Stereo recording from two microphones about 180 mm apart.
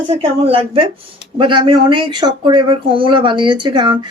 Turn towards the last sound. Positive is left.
turn(degrees=-25)  # may be behind; listen again after turning